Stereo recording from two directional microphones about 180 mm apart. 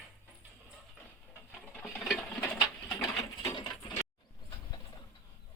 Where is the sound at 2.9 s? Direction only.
20° left (ahead or behind).